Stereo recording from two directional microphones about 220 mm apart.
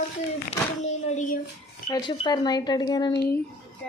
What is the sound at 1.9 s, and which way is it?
Speech, 20° left (ahead or behind).